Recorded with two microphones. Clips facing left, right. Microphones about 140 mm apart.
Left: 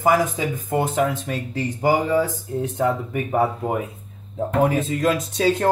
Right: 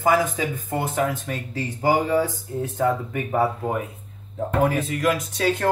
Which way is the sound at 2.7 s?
20° left (ahead or behind).